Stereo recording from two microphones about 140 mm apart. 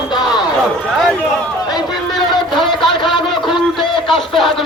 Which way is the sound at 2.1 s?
Centre (ahead or behind).